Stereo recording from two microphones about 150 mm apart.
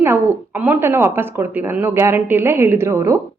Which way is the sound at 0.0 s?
15° right (ahead or behind).